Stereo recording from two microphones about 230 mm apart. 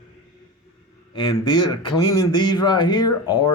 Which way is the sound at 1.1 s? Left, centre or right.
Centre.